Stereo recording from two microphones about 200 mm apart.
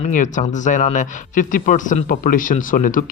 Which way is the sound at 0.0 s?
40° left (ahead or behind).